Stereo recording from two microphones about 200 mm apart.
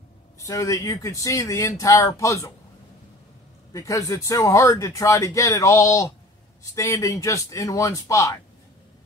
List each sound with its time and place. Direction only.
0.5 s speech: 15° left (ahead or behind)
3.7 s speech: 15° left (ahead or behind)